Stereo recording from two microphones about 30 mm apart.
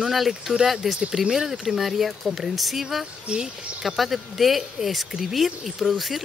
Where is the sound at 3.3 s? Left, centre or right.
Right.